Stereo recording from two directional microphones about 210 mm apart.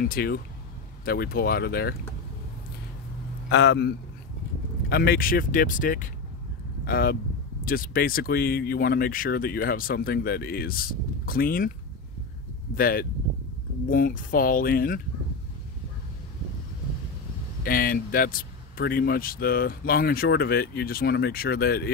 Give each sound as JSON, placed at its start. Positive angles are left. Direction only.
{"t": 0.0, "sound": "speech", "side_deg": 45}
{"t": 3.4, "sound": "a man's voice", "side_deg": 55}
{"t": 12.7, "sound": "speech", "side_deg": 45}
{"t": 17.6, "sound": "speech", "side_deg": 45}